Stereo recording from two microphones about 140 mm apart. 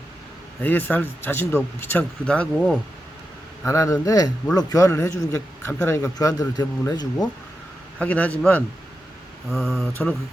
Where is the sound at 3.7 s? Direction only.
20° left (ahead or behind).